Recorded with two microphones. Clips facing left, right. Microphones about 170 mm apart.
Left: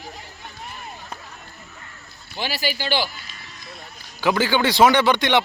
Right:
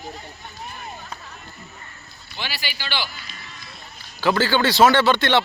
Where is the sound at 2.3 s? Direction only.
45° left (ahead or behind).